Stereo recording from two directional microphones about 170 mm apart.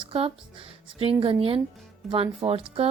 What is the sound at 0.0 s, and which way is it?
Speech, 35° right (ahead or behind).